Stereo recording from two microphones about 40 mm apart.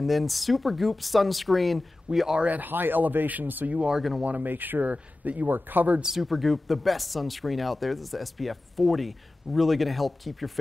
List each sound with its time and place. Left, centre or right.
0.0 s speech: centre
2.1 s speech: right
2.4 s speech: right
4.5 s speech: right
4.9 s speech: right
5.5 s speech: right
6.0 s speech: centre